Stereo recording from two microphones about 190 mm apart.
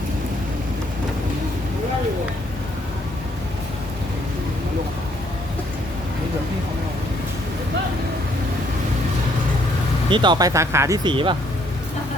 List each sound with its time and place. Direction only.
10.1 s speech: 25° right (ahead or behind)